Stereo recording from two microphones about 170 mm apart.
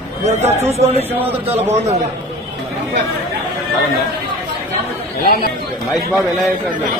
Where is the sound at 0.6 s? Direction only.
40° right (ahead or behind).